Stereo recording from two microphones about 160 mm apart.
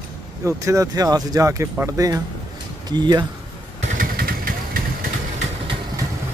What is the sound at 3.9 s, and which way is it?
Vehicle, 65° right (ahead or behind).